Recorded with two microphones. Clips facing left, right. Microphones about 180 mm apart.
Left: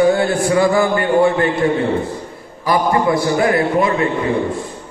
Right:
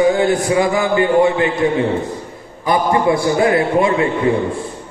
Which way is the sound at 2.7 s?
25° right (ahead or behind).